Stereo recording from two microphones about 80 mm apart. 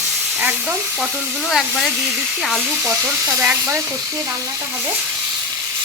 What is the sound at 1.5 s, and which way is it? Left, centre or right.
Speech, centre.